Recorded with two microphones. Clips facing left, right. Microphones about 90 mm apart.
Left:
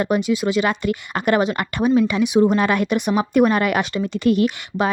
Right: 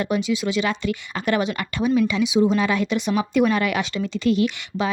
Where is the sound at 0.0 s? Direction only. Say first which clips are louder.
Left 3 dB; 45° left (ahead or behind).